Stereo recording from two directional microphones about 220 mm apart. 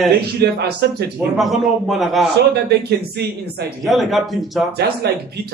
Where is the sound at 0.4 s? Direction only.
50° right (ahead or behind).